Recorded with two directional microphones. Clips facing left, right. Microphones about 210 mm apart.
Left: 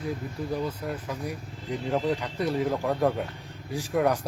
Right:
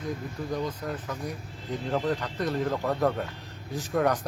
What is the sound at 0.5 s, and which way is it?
Speech, 10° left (ahead or behind).